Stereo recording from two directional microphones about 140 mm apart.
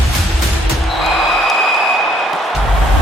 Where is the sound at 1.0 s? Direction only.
Centre (ahead or behind).